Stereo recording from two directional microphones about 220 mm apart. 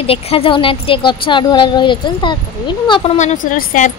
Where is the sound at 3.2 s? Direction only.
35° left (ahead or behind).